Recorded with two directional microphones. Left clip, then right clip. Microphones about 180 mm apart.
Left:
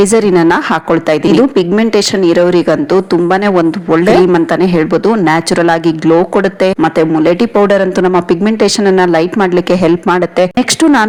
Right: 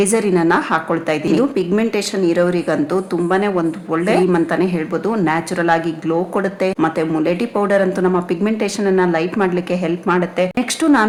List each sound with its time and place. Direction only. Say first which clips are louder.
0.0 s a woman's voice: left 7 dB; 40° left (ahead or behind)